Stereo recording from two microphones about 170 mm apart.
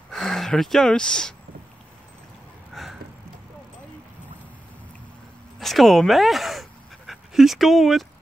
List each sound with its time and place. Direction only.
0.1 s speech: centre (ahead or behind)
2.7 s a sound: centre (ahead or behind)
5.6 s speech: centre (ahead or behind)